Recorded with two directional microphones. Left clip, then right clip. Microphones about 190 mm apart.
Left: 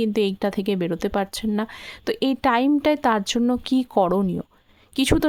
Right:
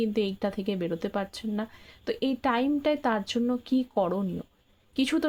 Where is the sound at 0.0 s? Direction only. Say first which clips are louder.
Left 6 dB; 40° left (ahead or behind).